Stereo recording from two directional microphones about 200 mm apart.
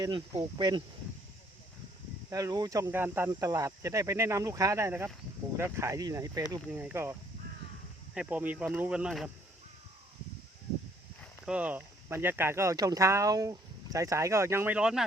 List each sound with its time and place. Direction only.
0.0 s speech: 20° right (ahead or behind)
2.3 s speech: 20° right (ahead or behind)
11.2 s speech: 5° right (ahead or behind)